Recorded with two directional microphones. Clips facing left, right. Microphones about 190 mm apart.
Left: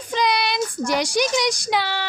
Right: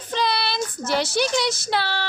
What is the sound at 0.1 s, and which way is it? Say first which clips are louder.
A woman's voice: left 2 dB; 15° left (ahead or behind).